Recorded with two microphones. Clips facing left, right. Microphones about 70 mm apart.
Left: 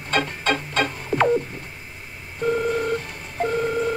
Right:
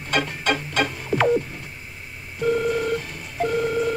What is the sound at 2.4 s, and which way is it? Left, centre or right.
Telephone dialing, left.